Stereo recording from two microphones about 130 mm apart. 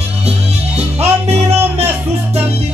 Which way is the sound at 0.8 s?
55° right (ahead or behind).